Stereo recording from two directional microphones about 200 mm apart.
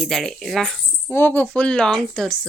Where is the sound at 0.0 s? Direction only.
Centre (ahead or behind).